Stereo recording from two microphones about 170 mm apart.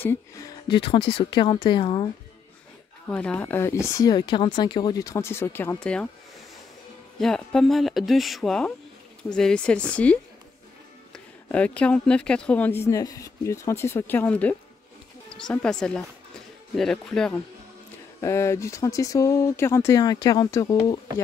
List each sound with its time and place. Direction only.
0.0 s speech: 15° left (ahead or behind)
0.7 s speech: 30° left (ahead or behind)
3.1 s speech: 5° left (ahead or behind)
7.2 s speech: 5° left (ahead or behind)
11.5 s speech: 5° left (ahead or behind)
18.2 s speech: 15° left (ahead or behind)